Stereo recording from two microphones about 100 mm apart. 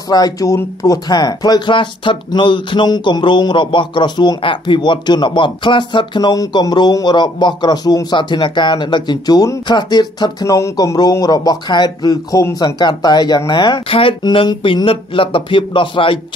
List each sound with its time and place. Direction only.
0.1 s speech: 40° left (ahead or behind)
10.4 s speech: 35° left (ahead or behind); by 14.1 s 65° left (ahead or behind)
14.2 s speech: 50° left (ahead or behind)